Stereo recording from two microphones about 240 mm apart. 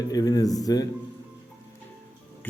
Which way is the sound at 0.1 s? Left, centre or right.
Centre.